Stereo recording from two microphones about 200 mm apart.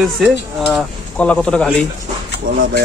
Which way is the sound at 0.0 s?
Centre (ahead or behind).